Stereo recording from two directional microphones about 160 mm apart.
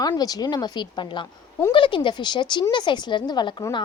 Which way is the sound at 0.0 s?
25° left (ahead or behind).